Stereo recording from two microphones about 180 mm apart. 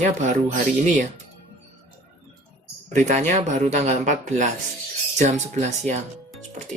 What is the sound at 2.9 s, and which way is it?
Speech, 40° right (ahead or behind).